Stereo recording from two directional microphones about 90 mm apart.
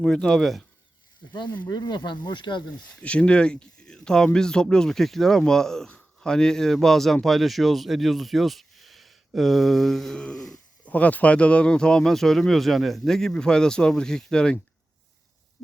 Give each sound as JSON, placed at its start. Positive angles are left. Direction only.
{"t": 0.0, "sound": "speech", "side_deg": 5}
{"t": 1.7, "sound": "speech", "side_deg": 50}
{"t": 3.0, "sound": "speech", "side_deg": 15}
{"t": 10.8, "sound": "speech", "side_deg": 15}